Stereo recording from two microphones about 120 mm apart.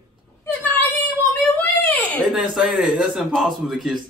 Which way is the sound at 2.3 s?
5° right (ahead or behind).